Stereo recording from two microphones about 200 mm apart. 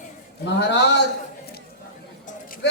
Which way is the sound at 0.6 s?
60° left (ahead or behind).